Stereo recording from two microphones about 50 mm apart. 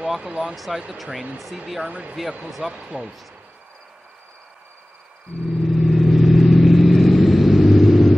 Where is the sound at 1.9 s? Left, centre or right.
Right.